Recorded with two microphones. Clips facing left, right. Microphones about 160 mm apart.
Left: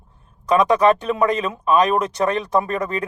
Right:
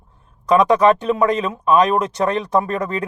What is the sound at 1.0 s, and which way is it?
Speech, 30° right (ahead or behind).